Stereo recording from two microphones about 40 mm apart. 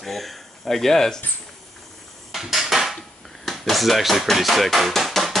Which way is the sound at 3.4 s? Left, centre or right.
Centre.